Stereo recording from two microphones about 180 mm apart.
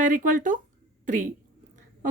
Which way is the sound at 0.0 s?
45° right (ahead or behind).